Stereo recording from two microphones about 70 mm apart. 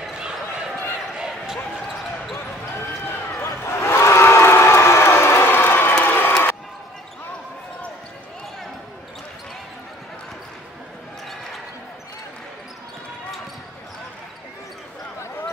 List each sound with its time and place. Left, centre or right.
0.0 s basketball bounce: centre
2.3 s basketball bounce: left
6.0 s crowd: left